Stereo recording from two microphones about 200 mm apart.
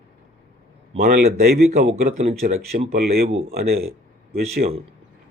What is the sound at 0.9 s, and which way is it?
Speech, 50° right (ahead or behind).